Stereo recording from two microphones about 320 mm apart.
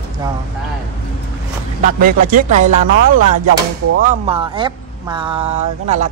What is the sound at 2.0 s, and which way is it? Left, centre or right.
Speech, right.